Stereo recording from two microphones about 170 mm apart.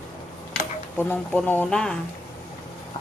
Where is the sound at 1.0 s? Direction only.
10° left (ahead or behind).